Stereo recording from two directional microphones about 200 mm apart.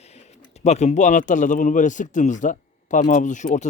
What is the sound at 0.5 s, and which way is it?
Speech, 35° left (ahead or behind).